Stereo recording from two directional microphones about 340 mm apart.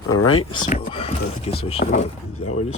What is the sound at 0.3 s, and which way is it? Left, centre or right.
Speech, centre.